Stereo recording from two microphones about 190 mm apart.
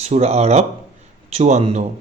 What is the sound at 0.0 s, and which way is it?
A man's voice, 35° right (ahead or behind).